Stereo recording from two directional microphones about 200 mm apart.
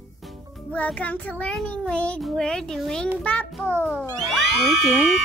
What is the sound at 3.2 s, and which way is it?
Speech, 5° left (ahead or behind).